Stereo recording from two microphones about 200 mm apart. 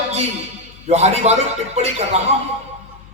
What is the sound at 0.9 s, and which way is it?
Speech, 30° right (ahead or behind).